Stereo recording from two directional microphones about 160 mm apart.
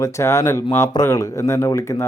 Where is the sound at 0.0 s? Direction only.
15° left (ahead or behind).